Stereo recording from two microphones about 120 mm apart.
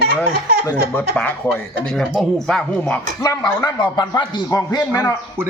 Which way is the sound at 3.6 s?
40° left (ahead or behind).